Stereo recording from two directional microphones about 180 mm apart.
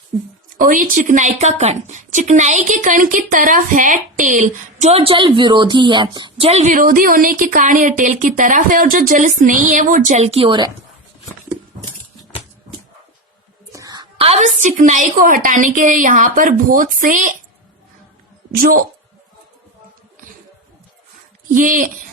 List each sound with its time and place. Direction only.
0.5 s a woman's voice: 50° right (ahead or behind); by 10.7 s 30° right (ahead or behind)
13.7 s a woman's voice: 20° right (ahead or behind); by 17.3 s 45° right (ahead or behind)
18.5 s a woman's voice: 55° right (ahead or behind)
21.5 s a woman's voice: 50° right (ahead or behind)